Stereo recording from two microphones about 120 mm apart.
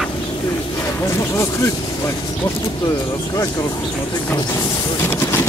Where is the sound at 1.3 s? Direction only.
25° left (ahead or behind).